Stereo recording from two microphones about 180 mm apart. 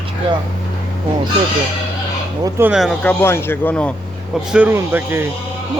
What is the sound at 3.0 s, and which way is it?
Speech, 15° left (ahead or behind).